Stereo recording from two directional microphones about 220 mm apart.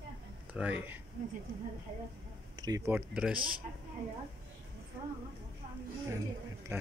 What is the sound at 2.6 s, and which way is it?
Speech, 15° right (ahead or behind).